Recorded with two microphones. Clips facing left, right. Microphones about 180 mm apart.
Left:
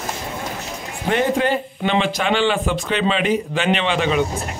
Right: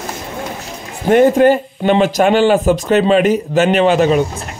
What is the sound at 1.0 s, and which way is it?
Speech, 45° right (ahead or behind).